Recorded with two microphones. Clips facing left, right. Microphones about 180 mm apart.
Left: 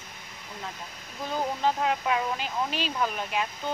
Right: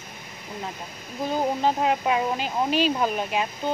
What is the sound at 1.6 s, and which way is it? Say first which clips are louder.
Speech: right 2 dB; 20° right (ahead or behind).